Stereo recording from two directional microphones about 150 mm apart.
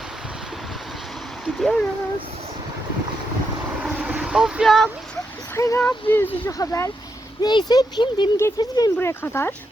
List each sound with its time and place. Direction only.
1.5 s speech: centre (ahead or behind)
3.8 s boat: 10° right (ahead or behind)
5.5 s speech: 20° left (ahead or behind)
9.0 s speech: 15° left (ahead or behind)